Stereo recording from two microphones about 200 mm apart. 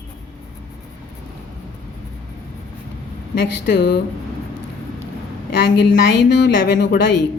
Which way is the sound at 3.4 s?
55° left (ahead or behind).